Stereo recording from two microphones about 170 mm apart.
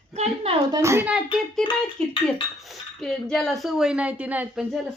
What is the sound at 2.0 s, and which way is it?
Cutlery, 5° left (ahead or behind).